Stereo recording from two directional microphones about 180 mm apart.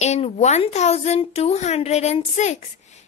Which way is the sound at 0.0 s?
40° left (ahead or behind).